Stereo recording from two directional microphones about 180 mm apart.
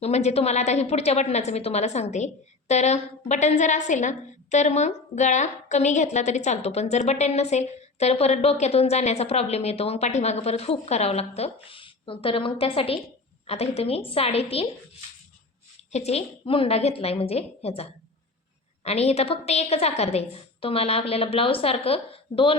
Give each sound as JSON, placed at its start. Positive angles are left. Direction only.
{"t": 0.0, "sound": "a woman's voice", "side_deg": 40}
{"t": 15.9, "sound": "a woman's voice", "side_deg": 35}